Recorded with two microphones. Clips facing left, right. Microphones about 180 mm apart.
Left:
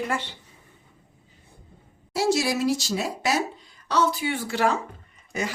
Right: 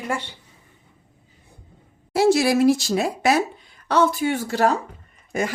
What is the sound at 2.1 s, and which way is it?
Speech, 60° right (ahead or behind).